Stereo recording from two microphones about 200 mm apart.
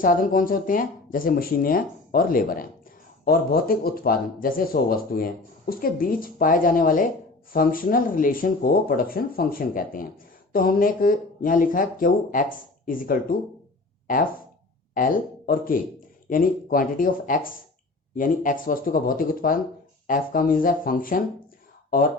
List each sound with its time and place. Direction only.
0.0 s speech: 45° left (ahead or behind)
14.9 s speech: 45° left (ahead or behind)